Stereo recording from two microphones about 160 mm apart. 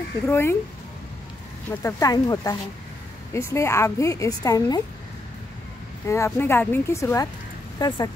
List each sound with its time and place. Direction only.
0.3 s speech: 15° left (ahead or behind)
1.7 s a woman's voice: 15° left (ahead or behind)
6.0 s a woman's voice: 15° left (ahead or behind)